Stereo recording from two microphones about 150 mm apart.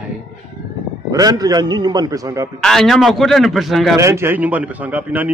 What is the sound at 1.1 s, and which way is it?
A man's voice, 25° right (ahead or behind).